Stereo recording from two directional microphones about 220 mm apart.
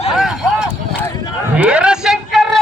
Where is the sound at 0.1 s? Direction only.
Centre (ahead or behind).